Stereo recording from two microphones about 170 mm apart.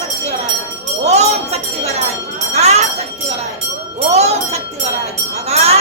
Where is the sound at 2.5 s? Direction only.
40° right (ahead or behind).